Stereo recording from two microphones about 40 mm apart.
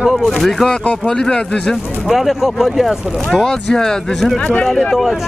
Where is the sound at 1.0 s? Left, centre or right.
Centre.